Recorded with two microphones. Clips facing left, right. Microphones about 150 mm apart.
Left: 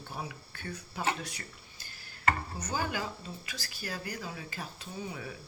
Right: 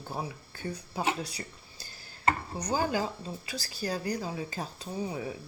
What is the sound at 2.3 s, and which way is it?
Speech, 35° right (ahead or behind).